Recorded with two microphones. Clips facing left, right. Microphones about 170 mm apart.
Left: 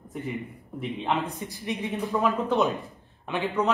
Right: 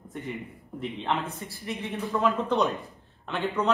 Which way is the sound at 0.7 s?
5° left (ahead or behind).